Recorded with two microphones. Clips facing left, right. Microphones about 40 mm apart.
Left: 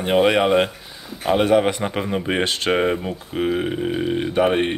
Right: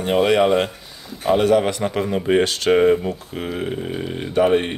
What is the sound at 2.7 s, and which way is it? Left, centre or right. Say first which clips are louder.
Speech: right 7 dB; centre.